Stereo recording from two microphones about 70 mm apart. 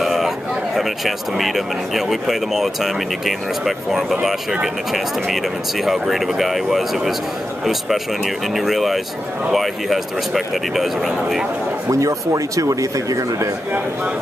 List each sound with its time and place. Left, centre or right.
0.0 s a sound: centre
0.7 s speech: centre
11.9 s a man's voice: right